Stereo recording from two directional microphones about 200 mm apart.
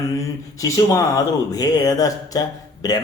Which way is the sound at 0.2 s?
15° left (ahead or behind).